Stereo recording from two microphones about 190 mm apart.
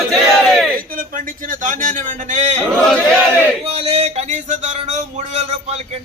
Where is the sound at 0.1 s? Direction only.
Centre (ahead or behind).